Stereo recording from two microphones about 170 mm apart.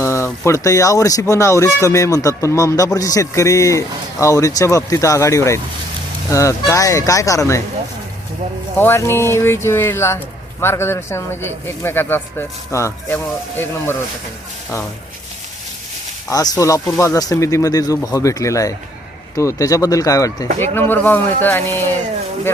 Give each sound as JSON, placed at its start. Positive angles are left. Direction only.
{"t": 0.0, "sound": "speech", "side_deg": 15}
{"t": 8.8, "sound": "speech", "side_deg": 15}
{"t": 16.3, "sound": "speech", "side_deg": 20}